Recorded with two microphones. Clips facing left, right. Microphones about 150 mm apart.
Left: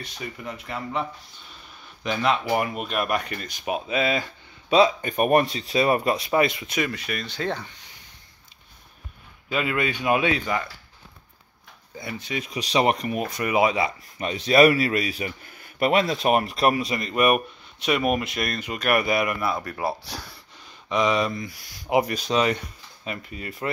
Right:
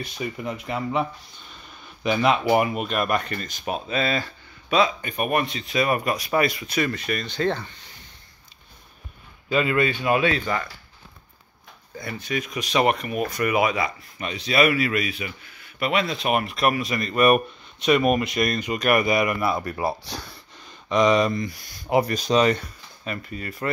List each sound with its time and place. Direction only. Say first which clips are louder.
0.0 s speech: right 5 dB; 20° right (ahead or behind)
2.0 s speech: right 3 dB; 15° right (ahead or behind)
2.8 s speech: right 2 dB; 5° left (ahead or behind)
4.6 s speech: left 3 dB; 30° left (ahead or behind); by 7.7 s 10° left (ahead or behind)
9.5 s speech: right 4 dB; 5° left (ahead or behind)
12.0 s speech: right 2 dB; 20° left (ahead or behind)
13.2 s speech: right 1 dB; 25° left (ahead or behind)
14.3 s speech: left 4 dB; 45° left (ahead or behind); by 21.9 s 5° left (ahead or behind)
21.9 s speech: right 2 dB; 15° left (ahead or behind)